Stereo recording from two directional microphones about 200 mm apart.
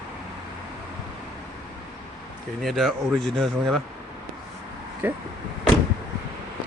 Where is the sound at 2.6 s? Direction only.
Centre (ahead or behind).